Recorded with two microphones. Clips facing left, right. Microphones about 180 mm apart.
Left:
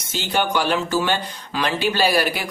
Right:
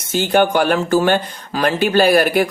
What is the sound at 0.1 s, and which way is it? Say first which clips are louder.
Speech: right 7 dB; 50° right (ahead or behind).